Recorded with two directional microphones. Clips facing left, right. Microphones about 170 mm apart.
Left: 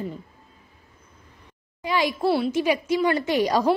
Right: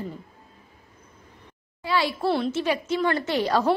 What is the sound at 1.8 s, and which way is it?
A woman's voice, 15° left (ahead or behind).